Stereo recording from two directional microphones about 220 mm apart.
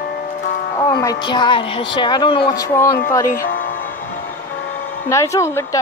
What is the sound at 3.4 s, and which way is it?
Music, 40° left (ahead or behind).